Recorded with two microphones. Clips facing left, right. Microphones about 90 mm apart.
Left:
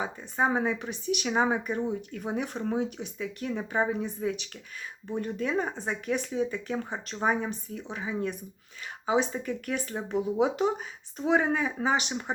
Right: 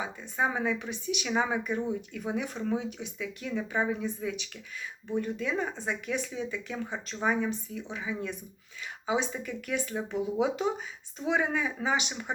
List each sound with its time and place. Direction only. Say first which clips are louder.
0.2 s speech: left 3 dB; 35° left (ahead or behind)
2.0 s speech: left 1 dB; 40° left (ahead or behind)